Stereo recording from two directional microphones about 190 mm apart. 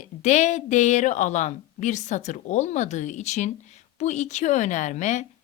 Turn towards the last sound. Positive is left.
turn(degrees=40)  # may be behind; listen again after turning